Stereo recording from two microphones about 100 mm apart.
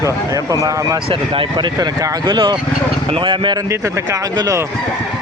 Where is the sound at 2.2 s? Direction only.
50° right (ahead or behind).